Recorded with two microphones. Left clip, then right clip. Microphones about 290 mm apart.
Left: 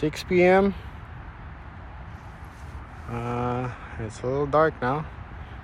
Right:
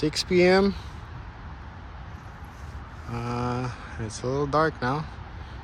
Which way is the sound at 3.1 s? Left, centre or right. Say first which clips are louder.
Left 2 dB; centre.